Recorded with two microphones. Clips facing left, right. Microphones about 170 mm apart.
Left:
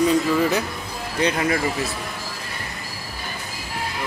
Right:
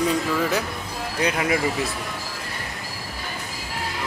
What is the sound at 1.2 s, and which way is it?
Speech, 10° right (ahead or behind).